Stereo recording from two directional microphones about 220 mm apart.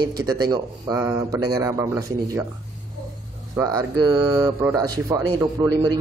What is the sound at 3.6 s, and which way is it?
Speech, 20° right (ahead or behind).